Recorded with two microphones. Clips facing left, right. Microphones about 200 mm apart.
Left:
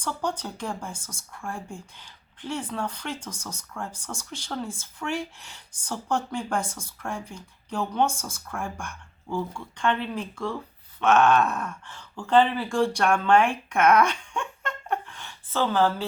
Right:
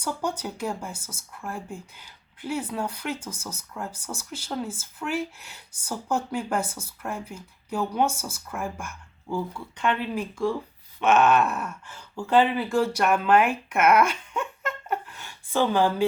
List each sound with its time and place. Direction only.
0.0 s speech: 10° right (ahead or behind)